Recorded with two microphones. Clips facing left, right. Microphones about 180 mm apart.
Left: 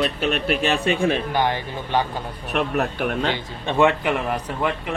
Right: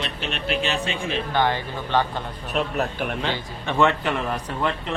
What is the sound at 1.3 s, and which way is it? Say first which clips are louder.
Speech: even; 15° left (ahead or behind).